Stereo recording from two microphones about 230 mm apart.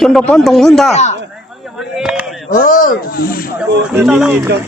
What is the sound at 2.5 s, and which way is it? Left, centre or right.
Speech, left.